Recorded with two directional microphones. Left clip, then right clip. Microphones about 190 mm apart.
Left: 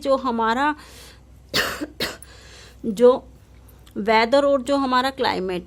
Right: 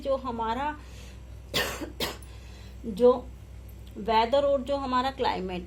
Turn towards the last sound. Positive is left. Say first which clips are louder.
# left 6 dB
turn(degrees=40)  # may be behind; listen again after turning